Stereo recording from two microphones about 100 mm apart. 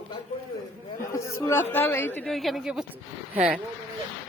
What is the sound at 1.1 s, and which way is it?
A man's voice, 30° left (ahead or behind).